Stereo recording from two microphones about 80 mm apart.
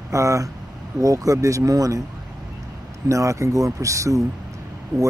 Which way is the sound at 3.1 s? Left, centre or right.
Right.